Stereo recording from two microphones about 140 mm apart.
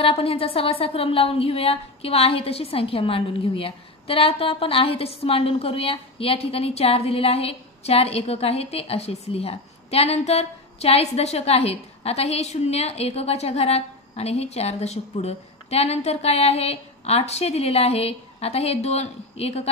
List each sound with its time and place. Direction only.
0.0 s a woman's voice: 40° left (ahead or behind)